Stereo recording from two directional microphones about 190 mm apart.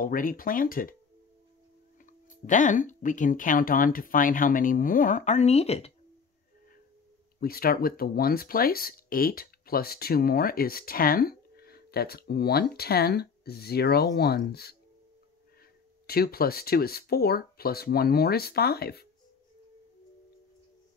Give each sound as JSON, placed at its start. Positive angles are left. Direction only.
{"t": 0.0, "sound": "speech", "side_deg": 45}
{"t": 2.0, "sound": "speech", "side_deg": 40}
{"t": 7.3, "sound": "speech", "side_deg": 50}
{"t": 16.1, "sound": "speech", "side_deg": 55}